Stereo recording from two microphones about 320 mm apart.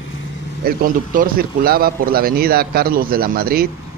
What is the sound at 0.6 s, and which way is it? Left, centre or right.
A man's voice, right.